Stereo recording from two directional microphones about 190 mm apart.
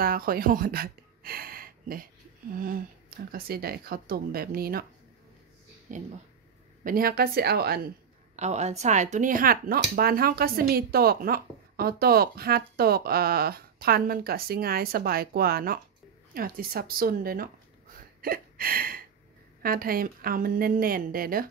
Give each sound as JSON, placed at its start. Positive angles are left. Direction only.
{"t": 0.0, "sound": "speech", "side_deg": -50}
{"t": 5.9, "sound": "speech", "side_deg": -40}
{"t": 8.4, "sound": "speech", "side_deg": -35}
{"t": 18.2, "sound": "a sound", "side_deg": -50}
{"t": 19.6, "sound": "speech", "side_deg": -50}